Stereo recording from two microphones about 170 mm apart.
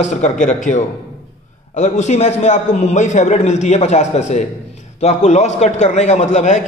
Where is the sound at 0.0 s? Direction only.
45° left (ahead or behind).